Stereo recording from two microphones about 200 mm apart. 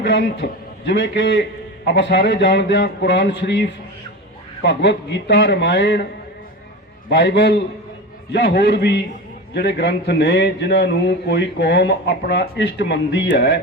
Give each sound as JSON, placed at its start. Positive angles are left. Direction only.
{"t": 0.0, "sound": "a man's voice", "side_deg": 55}
{"t": 7.1, "sound": "a man's voice", "side_deg": 55}